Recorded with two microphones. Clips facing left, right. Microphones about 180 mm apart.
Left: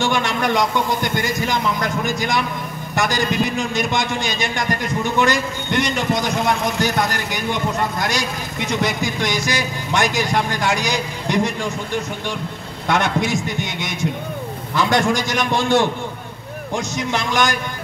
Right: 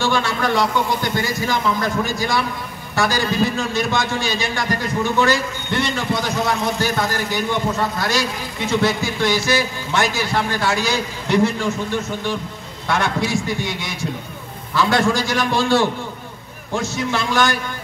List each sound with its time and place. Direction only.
0.0 s a sound: 20° left (ahead or behind)
1.2 s a man's voice: 20° left (ahead or behind)
12.8 s a man's voice: 20° left (ahead or behind)